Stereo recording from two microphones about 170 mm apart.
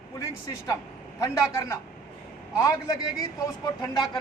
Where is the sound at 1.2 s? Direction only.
15° left (ahead or behind).